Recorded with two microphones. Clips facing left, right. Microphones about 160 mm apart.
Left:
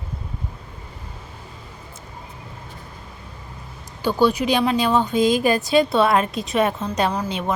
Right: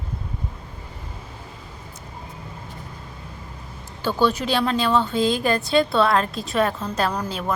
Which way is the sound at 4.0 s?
15° left (ahead or behind).